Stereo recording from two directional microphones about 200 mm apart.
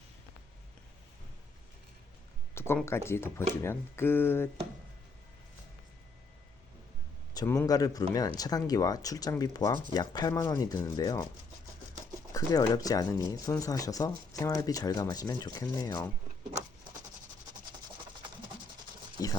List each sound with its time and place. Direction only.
2.6 s speech: 10° left (ahead or behind)
7.3 s speech: 10° left (ahead or behind)
12.3 s speech: 20° left (ahead or behind)
19.2 s a sound: 15° left (ahead or behind)